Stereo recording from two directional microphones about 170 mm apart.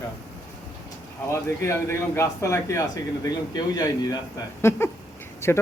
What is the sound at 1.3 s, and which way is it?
Speech, 15° left (ahead or behind).